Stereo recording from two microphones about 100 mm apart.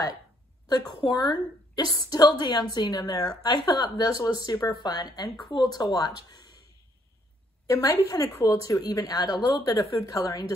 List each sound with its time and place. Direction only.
1.0 s a woman's voice: 45° left (ahead or behind)
7.6 s a woman's voice: 30° left (ahead or behind)